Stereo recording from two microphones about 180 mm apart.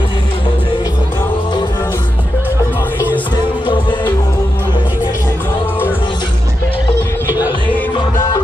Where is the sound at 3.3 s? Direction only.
25° left (ahead or behind).